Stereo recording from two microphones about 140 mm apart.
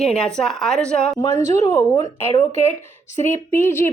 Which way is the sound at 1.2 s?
25° left (ahead or behind).